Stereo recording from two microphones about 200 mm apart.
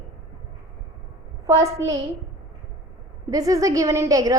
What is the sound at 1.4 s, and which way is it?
Speech, 15° right (ahead or behind).